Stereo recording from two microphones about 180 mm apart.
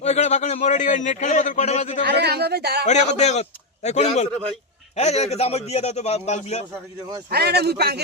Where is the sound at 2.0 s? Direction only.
65° right (ahead or behind).